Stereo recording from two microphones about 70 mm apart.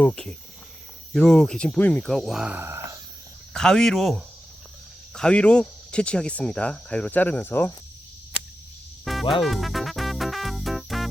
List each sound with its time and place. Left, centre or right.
0.0 s speech: centre
1.1 s speech: centre
2.0 s speech: centre
2.6 s a sound: right
3.5 s speech: centre
5.1 s speech: centre
9.0 s music: centre